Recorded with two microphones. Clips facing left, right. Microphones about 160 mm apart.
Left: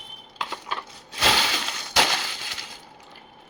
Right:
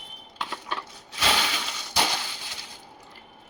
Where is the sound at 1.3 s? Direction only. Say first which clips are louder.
Left 2 dB; 90° left.